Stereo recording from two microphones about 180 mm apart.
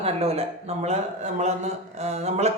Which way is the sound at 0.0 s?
35° right (ahead or behind).